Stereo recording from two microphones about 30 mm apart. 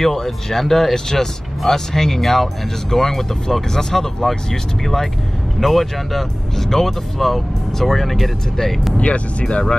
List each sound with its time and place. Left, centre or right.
0.1 s speech: centre
8.9 s speech: left